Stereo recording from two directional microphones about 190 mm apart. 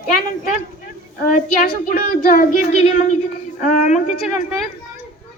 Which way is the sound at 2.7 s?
35° left (ahead or behind).